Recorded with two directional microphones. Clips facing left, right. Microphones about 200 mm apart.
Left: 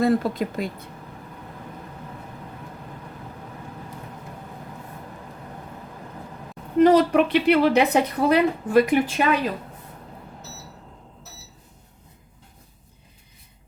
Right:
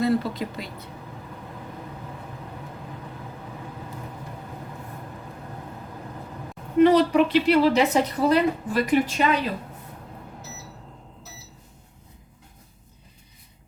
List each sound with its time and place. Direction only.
0.0 s speech: 50° left (ahead or behind)
6.8 s a woman's voice: 50° left (ahead or behind)